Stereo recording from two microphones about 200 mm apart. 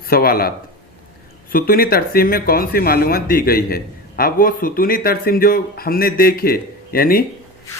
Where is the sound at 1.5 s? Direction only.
45° left (ahead or behind).